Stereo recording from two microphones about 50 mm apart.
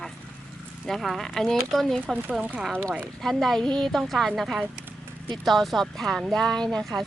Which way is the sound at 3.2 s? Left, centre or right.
Centre.